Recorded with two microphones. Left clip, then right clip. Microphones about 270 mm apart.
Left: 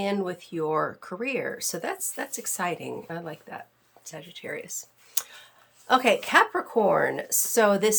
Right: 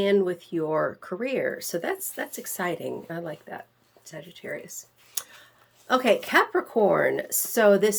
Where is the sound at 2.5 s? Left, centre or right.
Left.